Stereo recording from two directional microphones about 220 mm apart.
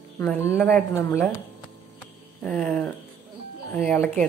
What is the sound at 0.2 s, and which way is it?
A woman's voice, 10° left (ahead or behind).